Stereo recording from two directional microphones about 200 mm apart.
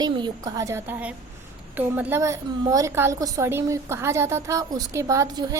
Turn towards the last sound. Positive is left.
turn(degrees=-15)  # may be behind; listen again after turning